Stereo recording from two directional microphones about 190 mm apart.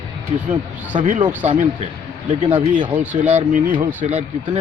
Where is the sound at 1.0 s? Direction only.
40° right (ahead or behind).